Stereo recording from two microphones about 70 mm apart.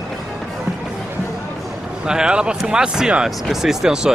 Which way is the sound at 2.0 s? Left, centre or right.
Centre.